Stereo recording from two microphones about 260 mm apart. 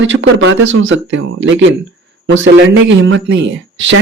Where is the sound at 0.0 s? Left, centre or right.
Right.